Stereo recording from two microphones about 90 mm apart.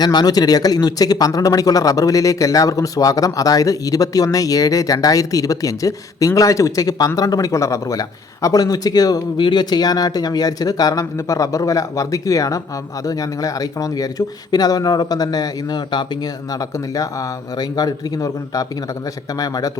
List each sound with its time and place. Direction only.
0.0 s speech: 50° left (ahead or behind)
9.4 s speech: 60° left (ahead or behind); by 19.7 s 45° left (ahead or behind)